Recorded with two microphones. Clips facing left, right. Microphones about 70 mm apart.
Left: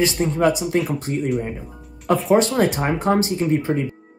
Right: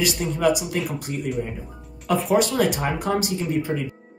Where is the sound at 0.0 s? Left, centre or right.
Left.